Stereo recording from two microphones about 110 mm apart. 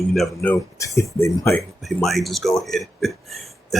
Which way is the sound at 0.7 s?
30° left (ahead or behind).